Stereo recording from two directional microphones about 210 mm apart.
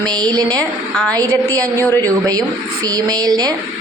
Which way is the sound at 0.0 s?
20° right (ahead or behind).